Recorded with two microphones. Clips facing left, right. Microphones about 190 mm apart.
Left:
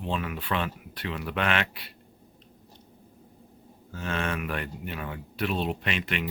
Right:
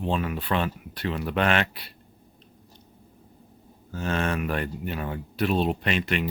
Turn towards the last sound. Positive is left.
turn(degrees=-40)  # may be behind; listen again after turning